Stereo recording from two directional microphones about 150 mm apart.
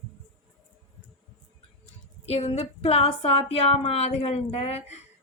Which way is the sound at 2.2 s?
40° left (ahead or behind).